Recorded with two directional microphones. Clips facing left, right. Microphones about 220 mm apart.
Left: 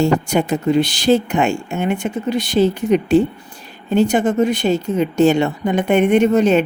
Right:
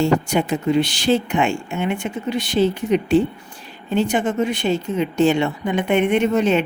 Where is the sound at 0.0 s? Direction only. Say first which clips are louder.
Left 2 dB; 40° left (ahead or behind).